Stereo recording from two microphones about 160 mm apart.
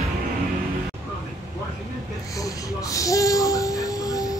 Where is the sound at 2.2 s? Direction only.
20° left (ahead or behind).